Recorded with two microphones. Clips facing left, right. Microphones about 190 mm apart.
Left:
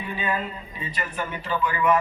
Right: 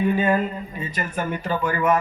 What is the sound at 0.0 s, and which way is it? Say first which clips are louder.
Speech: right 9 dB; 45° right (ahead or behind).